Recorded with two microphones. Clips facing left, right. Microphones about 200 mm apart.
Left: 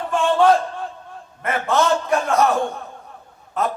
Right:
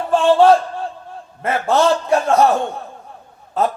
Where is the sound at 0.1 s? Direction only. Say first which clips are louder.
Right 4 dB; 30° right (ahead or behind).